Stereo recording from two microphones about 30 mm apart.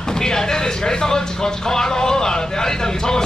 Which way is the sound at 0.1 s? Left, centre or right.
Left.